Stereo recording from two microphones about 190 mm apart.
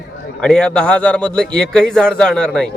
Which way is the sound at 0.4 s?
5° left (ahead or behind).